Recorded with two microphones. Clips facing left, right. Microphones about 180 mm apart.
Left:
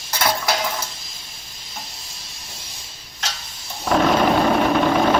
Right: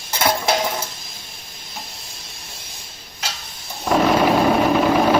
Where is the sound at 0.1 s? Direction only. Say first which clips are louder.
Right 2 dB; 25° right (ahead or behind).